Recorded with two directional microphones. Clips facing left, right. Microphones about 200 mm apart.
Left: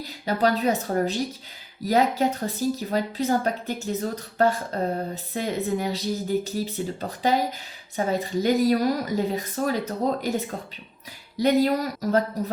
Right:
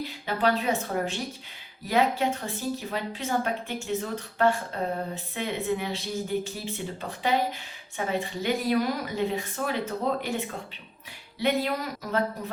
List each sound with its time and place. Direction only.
0.0 s a woman's voice: 40° left (ahead or behind)